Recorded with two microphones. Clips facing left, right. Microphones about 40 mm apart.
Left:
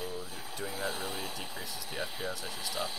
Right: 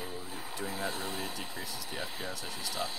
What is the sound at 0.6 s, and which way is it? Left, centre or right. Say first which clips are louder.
Speech: even; centre.